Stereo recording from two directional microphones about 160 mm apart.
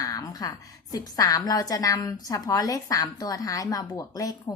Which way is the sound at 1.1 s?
20° left (ahead or behind).